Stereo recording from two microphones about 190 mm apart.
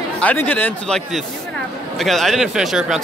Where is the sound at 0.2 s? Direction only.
10° left (ahead or behind).